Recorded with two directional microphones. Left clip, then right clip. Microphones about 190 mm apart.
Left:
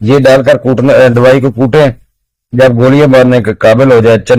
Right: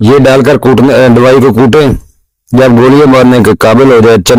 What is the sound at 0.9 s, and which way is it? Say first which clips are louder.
A man's voice: left 2 dB; 40° right (ahead or behind).